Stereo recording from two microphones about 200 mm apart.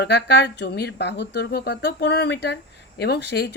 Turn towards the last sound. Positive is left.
turn(degrees=55)  # may be behind; listen again after turning